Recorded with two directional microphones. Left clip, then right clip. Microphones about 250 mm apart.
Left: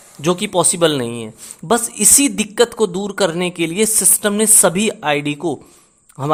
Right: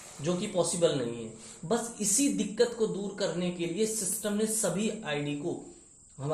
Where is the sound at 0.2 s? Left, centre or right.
Left.